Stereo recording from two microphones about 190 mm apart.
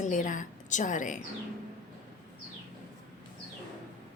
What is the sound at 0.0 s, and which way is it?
A woman's voice, 40° left (ahead or behind).